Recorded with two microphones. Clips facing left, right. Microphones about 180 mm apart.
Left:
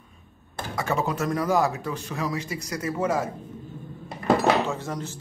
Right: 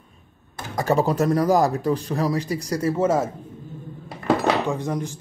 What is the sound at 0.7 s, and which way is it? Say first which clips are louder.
Speech: right 6 dB; 35° right (ahead or behind).